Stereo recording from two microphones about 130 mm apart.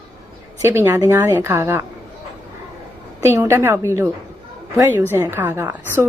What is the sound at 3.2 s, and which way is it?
A woman's voice, 20° right (ahead or behind).